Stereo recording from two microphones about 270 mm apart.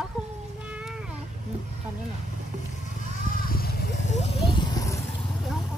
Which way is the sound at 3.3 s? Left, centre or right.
Left.